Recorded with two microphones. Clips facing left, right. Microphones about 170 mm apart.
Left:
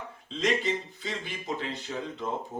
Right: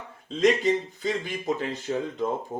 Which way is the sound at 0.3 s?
45° right (ahead or behind).